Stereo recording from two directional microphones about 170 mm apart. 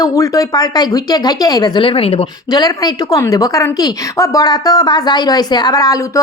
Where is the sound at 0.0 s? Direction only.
20° left (ahead or behind).